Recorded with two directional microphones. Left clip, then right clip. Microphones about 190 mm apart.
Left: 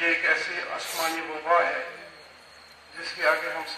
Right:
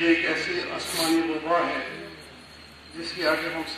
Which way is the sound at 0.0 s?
25° right (ahead or behind).